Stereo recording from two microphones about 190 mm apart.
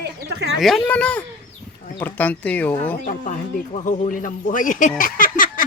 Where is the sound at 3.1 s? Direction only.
40° left (ahead or behind).